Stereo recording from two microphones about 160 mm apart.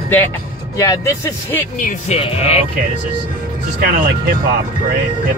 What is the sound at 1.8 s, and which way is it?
Speech, 55° left (ahead or behind).